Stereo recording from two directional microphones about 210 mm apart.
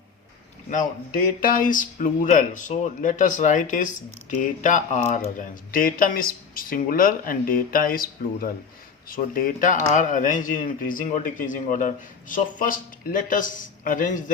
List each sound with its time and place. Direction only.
1.5 s speech: 40° left (ahead or behind)